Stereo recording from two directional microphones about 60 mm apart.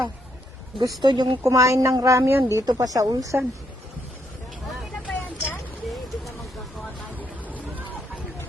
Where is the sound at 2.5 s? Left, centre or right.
Right.